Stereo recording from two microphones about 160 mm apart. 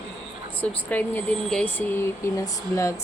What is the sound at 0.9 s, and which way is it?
Speech, 10° left (ahead or behind).